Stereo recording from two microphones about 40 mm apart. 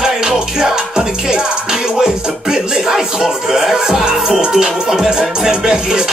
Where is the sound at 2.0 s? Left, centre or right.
Centre.